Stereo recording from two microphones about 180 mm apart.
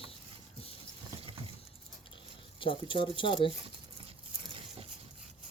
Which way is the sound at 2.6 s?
30° left (ahead or behind).